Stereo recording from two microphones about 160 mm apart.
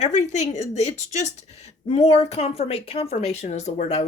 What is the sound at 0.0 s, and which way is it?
A woman's voice, 50° left (ahead or behind).